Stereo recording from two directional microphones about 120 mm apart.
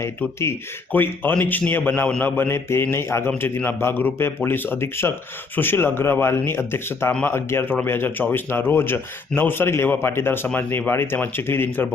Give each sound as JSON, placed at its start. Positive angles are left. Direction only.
{"t": 0.0, "sound": "a man's voice", "side_deg": 20}